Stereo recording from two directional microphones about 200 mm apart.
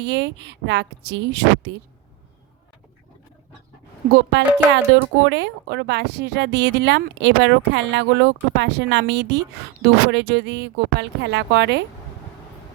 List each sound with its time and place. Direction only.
0.0 s a woman's voice: 60° right (ahead or behind)
4.1 s a woman's voice: 60° right (ahead or behind)